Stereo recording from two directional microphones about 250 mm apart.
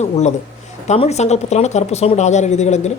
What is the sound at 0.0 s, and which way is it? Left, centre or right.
Speech, left.